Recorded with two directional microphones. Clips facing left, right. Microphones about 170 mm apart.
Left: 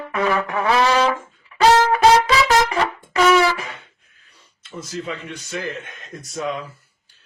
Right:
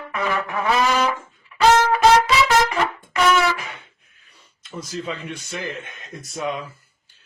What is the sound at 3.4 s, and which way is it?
Wind instrument, 35° left (ahead or behind).